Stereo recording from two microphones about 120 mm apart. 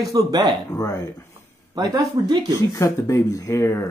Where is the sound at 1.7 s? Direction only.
30° right (ahead or behind).